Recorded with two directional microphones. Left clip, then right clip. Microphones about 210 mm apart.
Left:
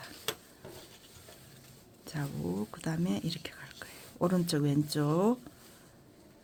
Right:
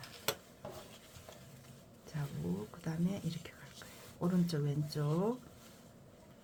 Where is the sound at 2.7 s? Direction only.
50° left (ahead or behind).